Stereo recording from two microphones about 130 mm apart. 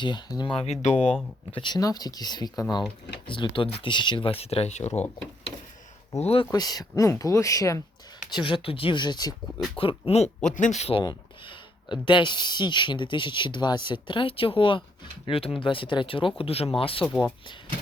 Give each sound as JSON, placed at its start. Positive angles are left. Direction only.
{"t": 0.0, "sound": "speech", "side_deg": 35}
{"t": 1.5, "sound": "speech", "side_deg": 40}
{"t": 6.1, "sound": "speech", "side_deg": 50}
{"t": 6.5, "sound": "speech", "side_deg": 30}
{"t": 8.3, "sound": "speech", "side_deg": 35}
{"t": 9.8, "sound": "speech", "side_deg": 10}
{"t": 10.1, "sound": "speech", "side_deg": 55}
{"t": 11.0, "sound": "speech", "side_deg": 35}